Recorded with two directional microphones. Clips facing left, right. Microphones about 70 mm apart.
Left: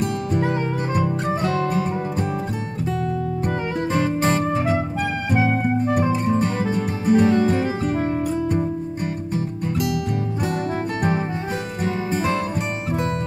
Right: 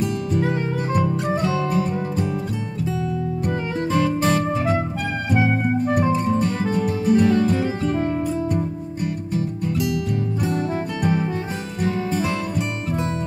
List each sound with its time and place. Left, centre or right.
1.2 s music: left
3.4 s music: left
6.8 s music: left
11.0 s music: left